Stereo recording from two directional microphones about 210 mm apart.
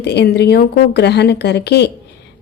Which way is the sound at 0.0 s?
55° left (ahead or behind).